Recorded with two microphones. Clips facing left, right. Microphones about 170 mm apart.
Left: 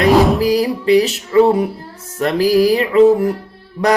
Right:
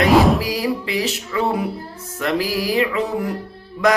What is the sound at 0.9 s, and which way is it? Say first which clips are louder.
Music: left 11 dB; 40° left (ahead or behind).